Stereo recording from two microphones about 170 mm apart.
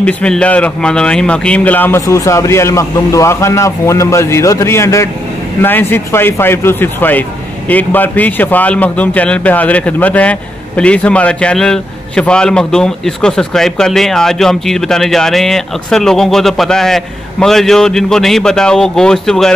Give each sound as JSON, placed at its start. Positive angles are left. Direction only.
{"t": 0.0, "sound": "a man's voice", "side_deg": 5}